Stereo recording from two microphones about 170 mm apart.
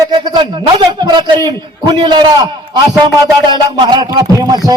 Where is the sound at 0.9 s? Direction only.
25° right (ahead or behind).